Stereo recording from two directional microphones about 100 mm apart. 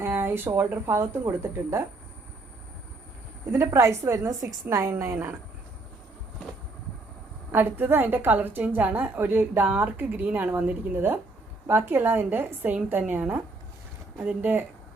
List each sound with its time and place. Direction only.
0.0 s a woman's voice: 20° right (ahead or behind)
3.4 s a woman's voice: 30° right (ahead or behind)
7.5 s a woman's voice: 20° right (ahead or behind)